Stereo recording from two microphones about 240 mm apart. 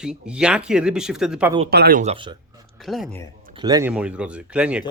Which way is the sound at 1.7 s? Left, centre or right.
Right.